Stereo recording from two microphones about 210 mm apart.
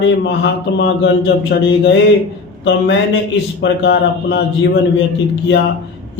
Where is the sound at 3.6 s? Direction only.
50° left (ahead or behind).